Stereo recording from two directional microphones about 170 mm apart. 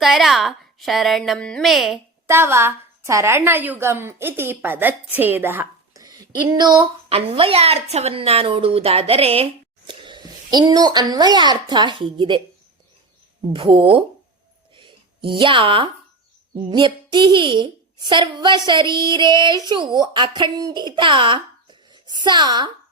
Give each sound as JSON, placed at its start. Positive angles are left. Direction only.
{"t": 0.0, "sound": "a woman's voice", "side_deg": 0}
{"t": 2.2, "sound": "a woman's voice", "side_deg": -15}
{"t": 13.5, "sound": "speech", "side_deg": -30}
{"t": 14.8, "sound": "a sound", "side_deg": -30}
{"t": 16.6, "sound": "a woman's voice", "side_deg": -30}